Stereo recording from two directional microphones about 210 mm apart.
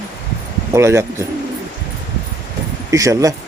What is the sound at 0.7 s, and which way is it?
Speech, 15° right (ahead or behind).